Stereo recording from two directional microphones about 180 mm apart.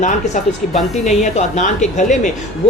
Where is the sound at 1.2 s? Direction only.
40° left (ahead or behind).